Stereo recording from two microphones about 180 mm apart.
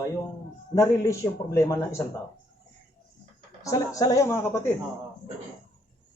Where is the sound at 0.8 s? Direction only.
15° left (ahead or behind).